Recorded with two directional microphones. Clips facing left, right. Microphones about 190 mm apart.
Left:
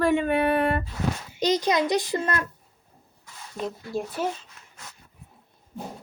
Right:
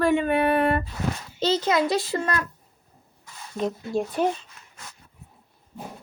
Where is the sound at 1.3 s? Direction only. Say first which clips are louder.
Right 1 dB; 15° left (ahead or behind).